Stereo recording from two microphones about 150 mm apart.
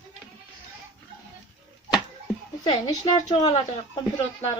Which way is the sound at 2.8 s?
25° left (ahead or behind).